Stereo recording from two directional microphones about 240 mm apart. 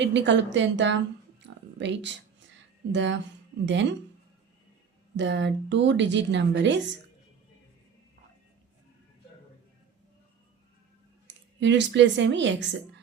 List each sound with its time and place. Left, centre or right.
0.0 s a woman's voice: right
5.1 s a woman's voice: right
11.6 s a woman's voice: right